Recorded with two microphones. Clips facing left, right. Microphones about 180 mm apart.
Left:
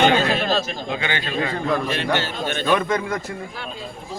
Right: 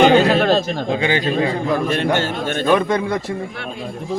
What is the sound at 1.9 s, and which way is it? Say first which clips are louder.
Speech: right 5 dB; 50° right (ahead or behind).